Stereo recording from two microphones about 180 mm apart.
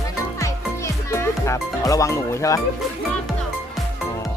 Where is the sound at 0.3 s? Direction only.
15° left (ahead or behind).